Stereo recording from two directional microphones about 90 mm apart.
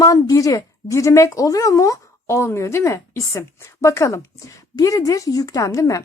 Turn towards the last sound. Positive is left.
turn(degrees=35)  # may be behind; listen again after turning